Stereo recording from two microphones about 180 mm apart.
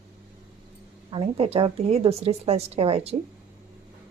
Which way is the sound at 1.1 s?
30° right (ahead or behind).